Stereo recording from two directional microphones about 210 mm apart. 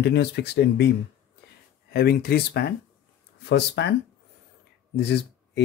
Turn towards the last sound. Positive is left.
turn(degrees=55)  # may be behind; listen again after turning